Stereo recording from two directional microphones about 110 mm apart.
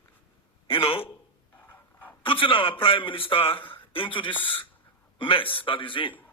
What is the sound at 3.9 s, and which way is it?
A man's voice, 50° left (ahead or behind).